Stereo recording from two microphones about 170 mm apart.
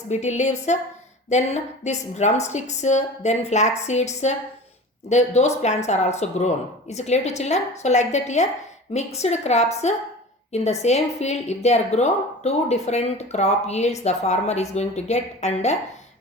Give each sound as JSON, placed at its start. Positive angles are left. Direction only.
{"t": 0.1, "sound": "a woman's voice", "side_deg": 40}